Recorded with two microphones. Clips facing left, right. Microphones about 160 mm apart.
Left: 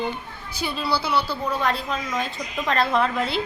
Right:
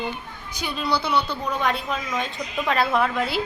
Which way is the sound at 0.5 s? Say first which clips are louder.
Even; 5° left (ahead or behind).